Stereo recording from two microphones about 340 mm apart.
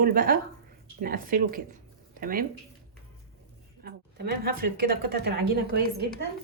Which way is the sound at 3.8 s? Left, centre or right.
Right.